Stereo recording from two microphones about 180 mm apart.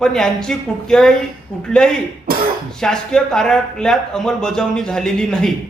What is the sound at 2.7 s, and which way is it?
Speech, 5° left (ahead or behind).